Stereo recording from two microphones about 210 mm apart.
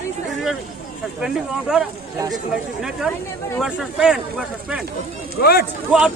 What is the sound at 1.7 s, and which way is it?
Speech, 5° right (ahead or behind).